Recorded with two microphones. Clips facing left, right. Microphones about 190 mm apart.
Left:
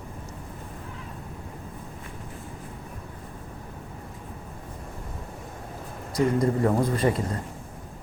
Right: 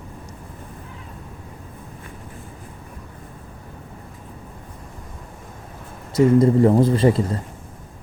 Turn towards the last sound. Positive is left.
turn(degrees=-30)  # may be behind; listen again after turning